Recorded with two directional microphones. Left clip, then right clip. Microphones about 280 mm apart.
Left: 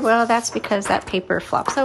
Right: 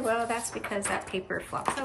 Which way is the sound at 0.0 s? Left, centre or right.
Left.